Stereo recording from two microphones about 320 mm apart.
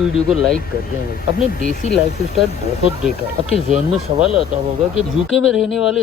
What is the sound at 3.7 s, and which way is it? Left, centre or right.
Speech, centre.